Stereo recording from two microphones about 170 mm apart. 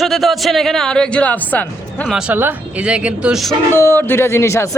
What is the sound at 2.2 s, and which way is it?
A man's voice, 10° right (ahead or behind).